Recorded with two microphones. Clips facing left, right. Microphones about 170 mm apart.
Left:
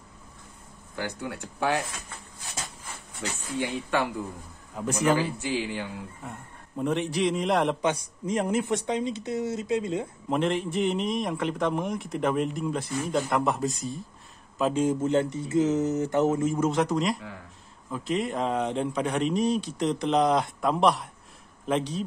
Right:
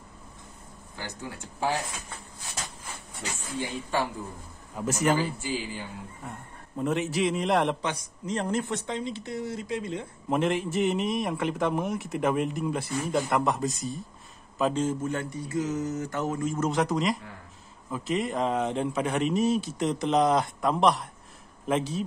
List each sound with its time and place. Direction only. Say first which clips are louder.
0.9 s speech: left 5 dB; 65° left (ahead or behind)
3.5 s speech: left 2 dB; 65° left (ahead or behind)
4.7 s a man's voice: left 1 dB; centre (ahead or behind)
5.4 s speech: left 3 dB; 80° left
6.2 s a man's voice: even; centre (ahead or behind)
7.8 s speech: left 5 dB; 10° left (ahead or behind)
10.3 s a man's voice: even; 5° right (ahead or behind)
15.0 s speech: left 6 dB; 25° left (ahead or behind)
16.6 s a man's voice: right 2 dB; centre (ahead or behind)